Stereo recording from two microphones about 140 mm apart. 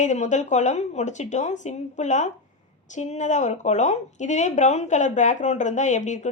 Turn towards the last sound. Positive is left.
turn(degrees=60)  # may be behind; listen again after turning